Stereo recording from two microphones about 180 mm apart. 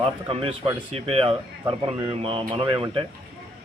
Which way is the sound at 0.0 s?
30° right (ahead or behind).